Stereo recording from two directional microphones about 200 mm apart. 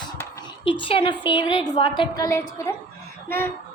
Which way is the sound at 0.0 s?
25° left (ahead or behind).